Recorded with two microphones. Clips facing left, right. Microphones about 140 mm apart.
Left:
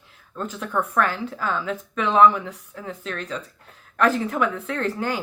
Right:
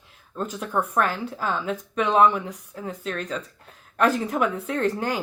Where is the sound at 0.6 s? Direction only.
35° right (ahead or behind).